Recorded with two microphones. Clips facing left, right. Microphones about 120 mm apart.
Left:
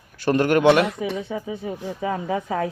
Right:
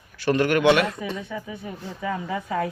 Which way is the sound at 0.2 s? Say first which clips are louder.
Left 2 dB; 45° left (ahead or behind).